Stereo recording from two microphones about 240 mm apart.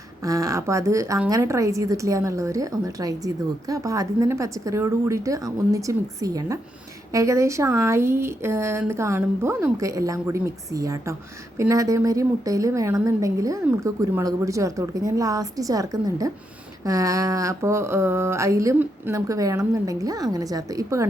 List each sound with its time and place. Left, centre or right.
0.2 s a woman's voice: centre